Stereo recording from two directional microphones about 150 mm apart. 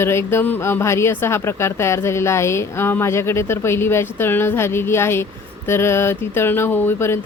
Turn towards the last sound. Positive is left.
turn(degrees=15)  # may be behind; listen again after turning